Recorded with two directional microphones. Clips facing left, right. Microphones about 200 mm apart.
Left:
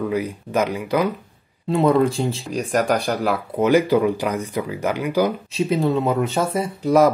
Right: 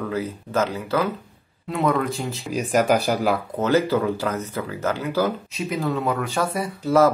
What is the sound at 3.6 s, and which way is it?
Speech, 15° left (ahead or behind).